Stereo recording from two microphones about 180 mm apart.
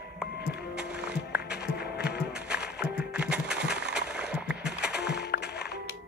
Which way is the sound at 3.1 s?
5° right (ahead or behind).